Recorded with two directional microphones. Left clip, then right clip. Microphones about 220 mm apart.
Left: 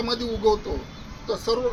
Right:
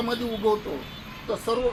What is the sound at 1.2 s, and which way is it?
Speech, 15° left (ahead or behind).